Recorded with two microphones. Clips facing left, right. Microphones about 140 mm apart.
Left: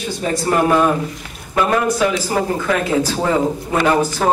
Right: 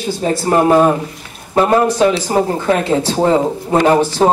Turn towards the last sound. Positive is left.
turn(degrees=-30)  # may be behind; listen again after turning